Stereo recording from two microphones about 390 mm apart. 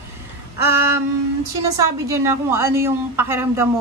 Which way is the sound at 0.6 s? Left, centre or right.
Right.